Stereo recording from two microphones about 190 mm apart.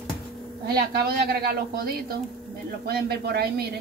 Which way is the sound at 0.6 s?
55° right (ahead or behind).